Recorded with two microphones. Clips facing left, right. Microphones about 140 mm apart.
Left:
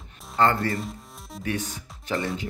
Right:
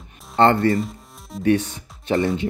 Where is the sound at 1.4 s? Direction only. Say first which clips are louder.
Right 11 dB; 30° right (ahead or behind).